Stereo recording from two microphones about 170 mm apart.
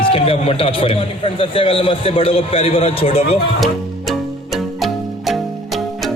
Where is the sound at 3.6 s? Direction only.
Centre (ahead or behind).